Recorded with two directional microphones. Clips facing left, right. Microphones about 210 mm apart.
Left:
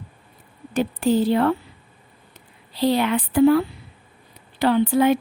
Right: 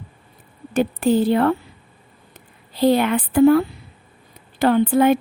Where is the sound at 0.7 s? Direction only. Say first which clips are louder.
Right 2 dB; 50° right (ahead or behind).